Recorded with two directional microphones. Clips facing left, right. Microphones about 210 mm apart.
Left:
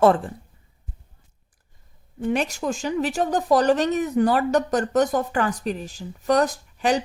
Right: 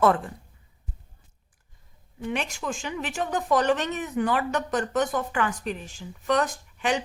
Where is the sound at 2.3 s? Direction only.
40° left (ahead or behind).